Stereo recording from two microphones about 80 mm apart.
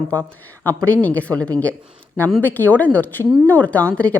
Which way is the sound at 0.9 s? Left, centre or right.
Centre.